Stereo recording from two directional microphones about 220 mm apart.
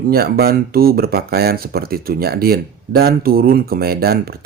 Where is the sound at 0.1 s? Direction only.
45° right (ahead or behind).